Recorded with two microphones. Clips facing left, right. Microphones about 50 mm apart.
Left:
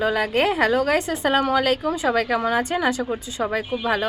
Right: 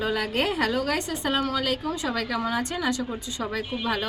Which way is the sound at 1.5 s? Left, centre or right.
Left.